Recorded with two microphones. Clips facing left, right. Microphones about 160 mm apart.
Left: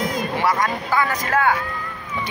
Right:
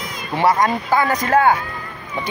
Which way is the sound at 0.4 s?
25° right (ahead or behind).